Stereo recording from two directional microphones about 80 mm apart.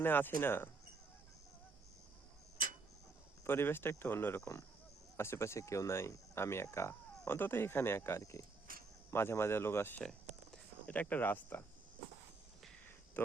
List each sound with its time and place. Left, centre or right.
0.0 s speech: left
3.4 s speech: left
8.2 s speech: left
9.0 s speech: left
10.0 s a sound: centre
10.9 s speech: left
13.2 s speech: left